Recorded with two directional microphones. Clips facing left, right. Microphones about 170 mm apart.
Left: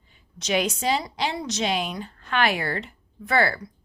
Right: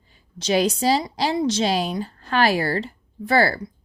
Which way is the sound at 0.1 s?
35° right (ahead or behind).